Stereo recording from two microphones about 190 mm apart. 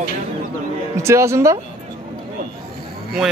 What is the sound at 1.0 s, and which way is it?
Speech, 15° right (ahead or behind).